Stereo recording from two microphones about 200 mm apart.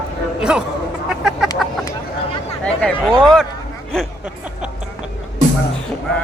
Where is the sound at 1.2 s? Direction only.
Centre (ahead or behind).